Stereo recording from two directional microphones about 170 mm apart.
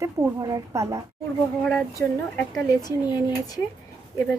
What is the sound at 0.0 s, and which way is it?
Speech, 20° right (ahead or behind).